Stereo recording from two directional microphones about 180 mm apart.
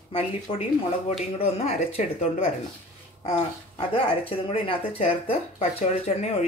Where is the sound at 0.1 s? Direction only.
35° left (ahead or behind).